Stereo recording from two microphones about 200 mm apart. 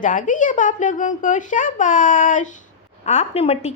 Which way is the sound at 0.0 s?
40° left (ahead or behind).